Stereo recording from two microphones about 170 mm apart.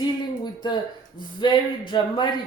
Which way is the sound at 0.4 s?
25° left (ahead or behind).